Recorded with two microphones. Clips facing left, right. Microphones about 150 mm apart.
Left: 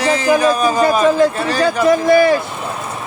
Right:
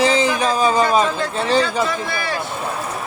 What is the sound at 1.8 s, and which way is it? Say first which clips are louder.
Speech: left 13 dB; 40° left (ahead or behind).